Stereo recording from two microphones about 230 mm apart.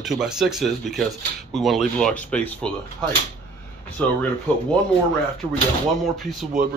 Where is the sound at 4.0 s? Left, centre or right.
Centre.